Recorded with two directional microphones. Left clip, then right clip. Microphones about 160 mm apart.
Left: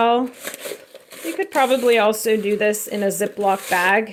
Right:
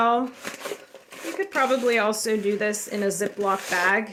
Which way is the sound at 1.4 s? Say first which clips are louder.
Left 5 dB; 30° left (ahead or behind).